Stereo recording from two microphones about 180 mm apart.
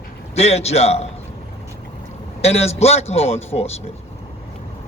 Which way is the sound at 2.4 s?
35° left (ahead or behind).